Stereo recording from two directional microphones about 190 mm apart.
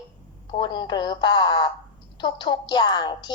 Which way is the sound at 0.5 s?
25° left (ahead or behind).